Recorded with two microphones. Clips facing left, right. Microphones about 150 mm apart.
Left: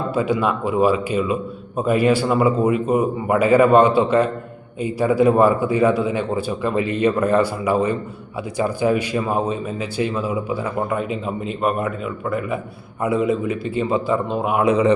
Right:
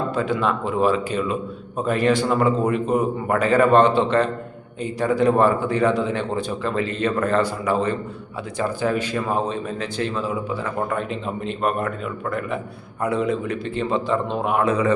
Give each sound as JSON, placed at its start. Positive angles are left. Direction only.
{"t": 0.1, "sound": "a man's voice", "side_deg": 10}
{"t": 14.6, "sound": "a man's voice", "side_deg": 15}